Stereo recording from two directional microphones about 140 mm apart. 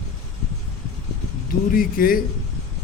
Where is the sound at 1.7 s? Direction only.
90° left.